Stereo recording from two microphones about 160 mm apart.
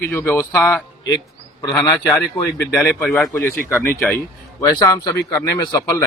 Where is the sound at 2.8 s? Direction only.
15° left (ahead or behind).